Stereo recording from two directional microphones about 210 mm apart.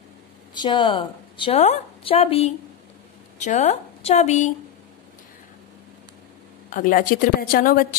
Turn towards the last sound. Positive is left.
turn(degrees=45)  # may be behind; listen again after turning